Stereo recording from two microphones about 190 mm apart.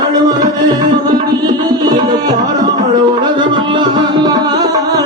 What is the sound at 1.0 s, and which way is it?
Tabla, 20° right (ahead or behind).